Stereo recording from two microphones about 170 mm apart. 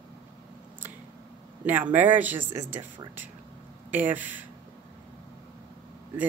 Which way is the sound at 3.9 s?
10° right (ahead or behind).